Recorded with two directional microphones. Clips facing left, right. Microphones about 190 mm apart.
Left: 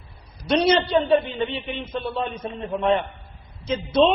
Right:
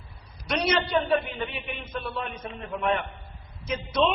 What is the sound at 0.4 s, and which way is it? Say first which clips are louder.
A man's voice: left 7 dB; 30° left (ahead or behind).